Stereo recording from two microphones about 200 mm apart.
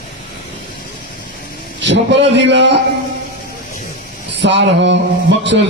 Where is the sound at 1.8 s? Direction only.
65° right (ahead or behind).